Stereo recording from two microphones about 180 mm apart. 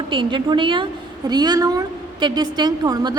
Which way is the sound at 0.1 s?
25° right (ahead or behind).